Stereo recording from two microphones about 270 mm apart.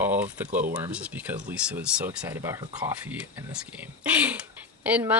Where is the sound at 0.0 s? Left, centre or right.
Centre.